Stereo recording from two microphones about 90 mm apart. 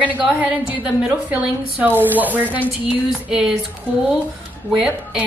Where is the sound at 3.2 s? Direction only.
5° right (ahead or behind).